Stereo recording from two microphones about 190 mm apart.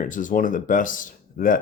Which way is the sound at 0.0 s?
45° left (ahead or behind).